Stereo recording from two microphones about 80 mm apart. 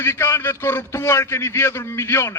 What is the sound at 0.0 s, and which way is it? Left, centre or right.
A man's voice, left.